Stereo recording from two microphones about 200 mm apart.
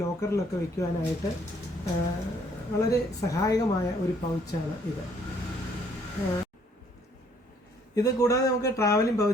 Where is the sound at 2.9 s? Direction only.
15° left (ahead or behind).